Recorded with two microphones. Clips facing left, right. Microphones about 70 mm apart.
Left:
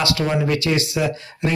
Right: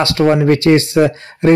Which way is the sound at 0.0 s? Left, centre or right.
Right.